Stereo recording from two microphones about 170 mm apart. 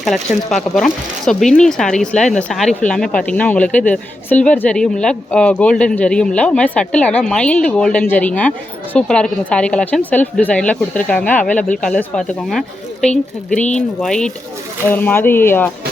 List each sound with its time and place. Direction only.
0.0 s speech: centre (ahead or behind)
13.6 s speech: 45° left (ahead or behind)
14.0 s speech: 5° left (ahead or behind)